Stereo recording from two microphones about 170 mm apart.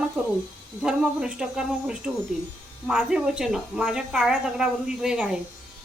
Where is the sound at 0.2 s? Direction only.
5° right (ahead or behind).